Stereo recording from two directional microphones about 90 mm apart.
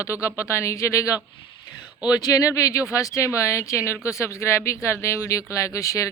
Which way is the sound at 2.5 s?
35° left (ahead or behind).